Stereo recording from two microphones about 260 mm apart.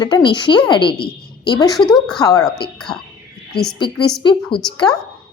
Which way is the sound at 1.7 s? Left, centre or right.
Centre.